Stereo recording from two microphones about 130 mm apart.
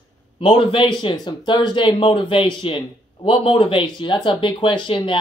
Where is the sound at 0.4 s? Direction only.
40° left (ahead or behind).